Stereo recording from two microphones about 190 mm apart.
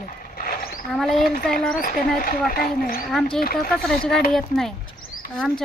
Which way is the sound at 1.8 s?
45° left (ahead or behind).